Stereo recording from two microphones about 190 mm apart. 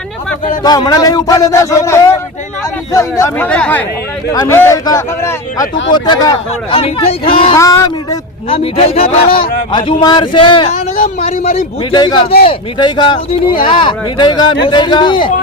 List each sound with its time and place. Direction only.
0.6 s a man's voice: 20° left (ahead or behind)
7.6 s speech: 15° left (ahead or behind)
8.4 s speech: 30° left (ahead or behind)